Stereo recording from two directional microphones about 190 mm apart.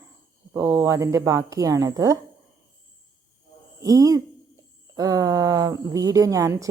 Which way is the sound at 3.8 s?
20° right (ahead or behind).